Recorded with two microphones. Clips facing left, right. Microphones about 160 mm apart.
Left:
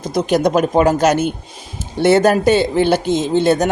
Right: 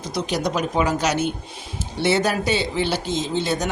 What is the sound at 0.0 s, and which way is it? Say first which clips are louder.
Speech: left 9 dB; 50° left (ahead or behind).